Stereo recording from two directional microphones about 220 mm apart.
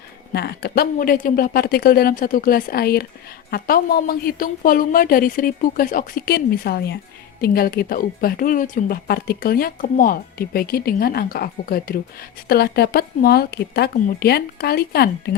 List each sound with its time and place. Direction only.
0.3 s a woman's voice: 45° left (ahead or behind)